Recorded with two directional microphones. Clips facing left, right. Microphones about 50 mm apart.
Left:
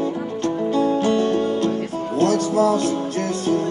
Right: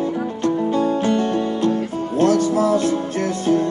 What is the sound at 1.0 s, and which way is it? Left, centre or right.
Music, right.